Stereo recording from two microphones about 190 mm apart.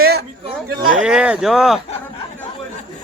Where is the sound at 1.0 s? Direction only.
5° right (ahead or behind).